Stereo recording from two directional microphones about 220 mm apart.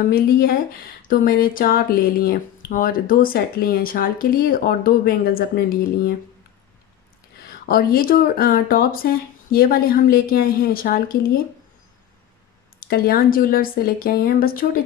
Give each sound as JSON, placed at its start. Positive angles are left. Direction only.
{"t": 0.0, "sound": "speech", "side_deg": 40}
{"t": 7.3, "sound": "speech", "side_deg": 45}
{"t": 12.8, "sound": "speech", "side_deg": 40}